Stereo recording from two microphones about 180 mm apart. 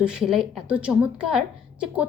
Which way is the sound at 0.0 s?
5° right (ahead or behind).